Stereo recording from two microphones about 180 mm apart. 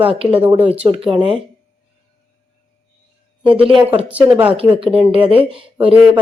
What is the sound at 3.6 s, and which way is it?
Speech, 30° right (ahead or behind).